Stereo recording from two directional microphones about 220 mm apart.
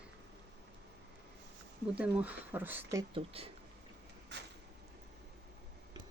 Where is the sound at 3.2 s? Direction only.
25° right (ahead or behind).